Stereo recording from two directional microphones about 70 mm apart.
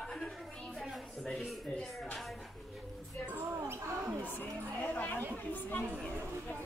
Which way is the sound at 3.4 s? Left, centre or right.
Right.